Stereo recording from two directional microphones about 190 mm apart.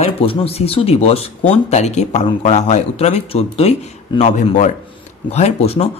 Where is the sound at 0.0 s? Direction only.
30° left (ahead or behind).